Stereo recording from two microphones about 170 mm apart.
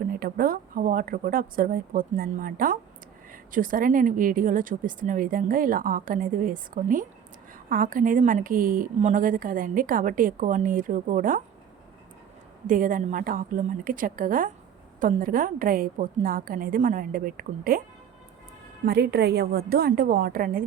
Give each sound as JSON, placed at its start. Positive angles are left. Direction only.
{"t": 0.1, "sound": "a woman's voice", "side_deg": -60}
{"t": 12.6, "sound": "a woman's voice", "side_deg": -50}
{"t": 18.9, "sound": "a woman's voice", "side_deg": -70}